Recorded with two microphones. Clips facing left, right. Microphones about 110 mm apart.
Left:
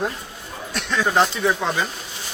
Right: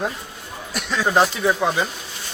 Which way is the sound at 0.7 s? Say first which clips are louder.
Right 1 dB; 5° right (ahead or behind).